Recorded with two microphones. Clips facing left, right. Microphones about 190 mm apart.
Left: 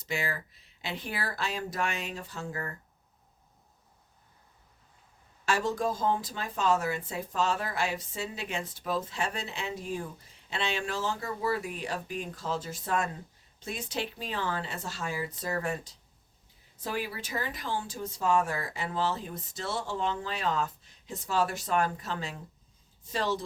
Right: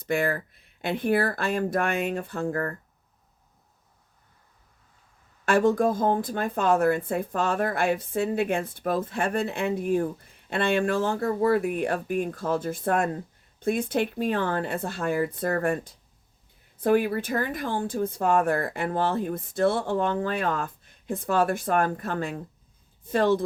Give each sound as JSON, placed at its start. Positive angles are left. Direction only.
{"t": 0.0, "sound": "speech", "side_deg": -55}
{"t": 5.5, "sound": "speech", "side_deg": -55}